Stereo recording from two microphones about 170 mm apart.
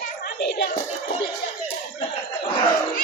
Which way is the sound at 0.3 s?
80° left.